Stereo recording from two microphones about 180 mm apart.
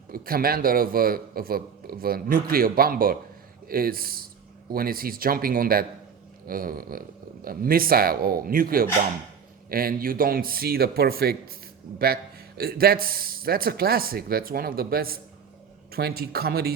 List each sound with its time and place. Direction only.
0.1 s a man's voice: 55° right (ahead or behind)
6.5 s a sound: 55° right (ahead or behind)
7.4 s a man's voice: 55° right (ahead or behind)